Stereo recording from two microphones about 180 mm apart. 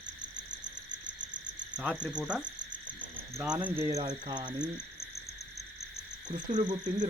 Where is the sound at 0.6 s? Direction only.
25° right (ahead or behind).